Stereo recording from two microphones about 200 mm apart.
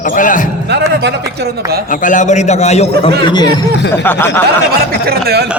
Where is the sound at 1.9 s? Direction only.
40° left (ahead or behind).